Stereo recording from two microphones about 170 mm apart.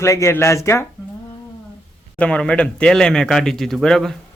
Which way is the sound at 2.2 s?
5° left (ahead or behind).